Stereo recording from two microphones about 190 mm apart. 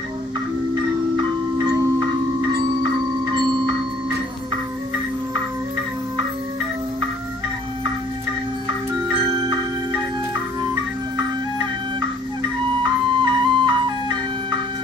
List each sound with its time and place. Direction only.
9.1 s music: 25° right (ahead or behind)
12.4 s music: 25° right (ahead or behind)